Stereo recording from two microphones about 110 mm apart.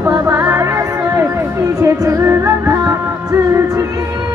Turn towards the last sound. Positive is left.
turn(degrees=-25)  # may be behind; listen again after turning